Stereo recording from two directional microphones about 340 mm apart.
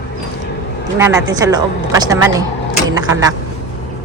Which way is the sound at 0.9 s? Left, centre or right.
Centre.